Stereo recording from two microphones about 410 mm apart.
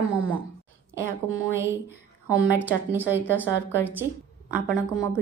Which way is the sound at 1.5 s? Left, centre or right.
Centre.